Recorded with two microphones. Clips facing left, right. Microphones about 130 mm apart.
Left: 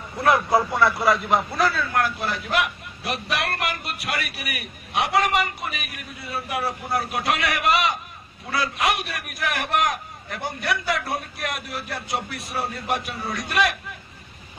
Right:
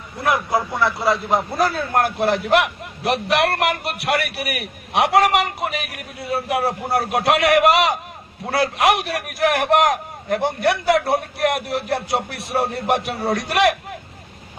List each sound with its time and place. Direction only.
1.0 s a man's voice: 30° right (ahead or behind); by 8.0 s 90° right
8.5 s a man's voice: 80° right
12.1 s music: 65° right (ahead or behind)
12.7 s a man's voice: 70° right (ahead or behind)